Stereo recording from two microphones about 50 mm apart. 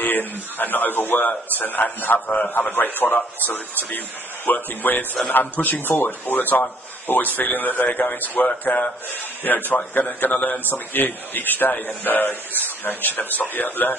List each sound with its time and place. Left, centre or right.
0.0 s speech: left
4.5 s speech: left
9.7 s speech: left